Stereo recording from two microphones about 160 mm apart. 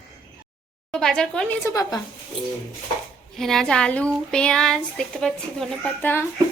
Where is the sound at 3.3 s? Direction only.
Centre (ahead or behind).